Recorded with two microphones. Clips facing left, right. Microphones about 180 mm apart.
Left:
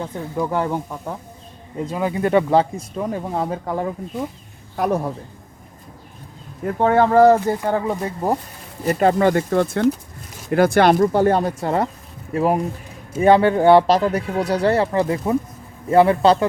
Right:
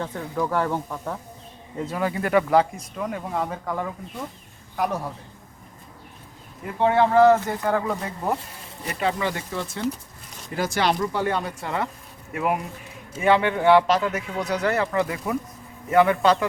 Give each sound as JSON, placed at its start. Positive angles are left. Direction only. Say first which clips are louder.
{"t": 0.0, "sound": "speech", "louder": "left 2 dB", "side_deg": 15}
{"t": 4.8, "sound": "speech", "louder": "left 5 dB", "side_deg": 45}
{"t": 6.7, "sound": "speech", "louder": "left 4 dB", "side_deg": 45}
{"t": 7.4, "sound": "speech", "louder": "left 4 dB", "side_deg": 25}
{"t": 8.8, "sound": "speech", "louder": "left 9 dB", "side_deg": 45}
{"t": 10.9, "sound": "speech", "louder": "left 9 dB", "side_deg": 40}